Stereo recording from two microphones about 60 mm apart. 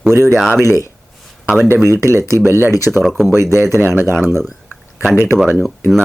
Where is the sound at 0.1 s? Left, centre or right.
Right.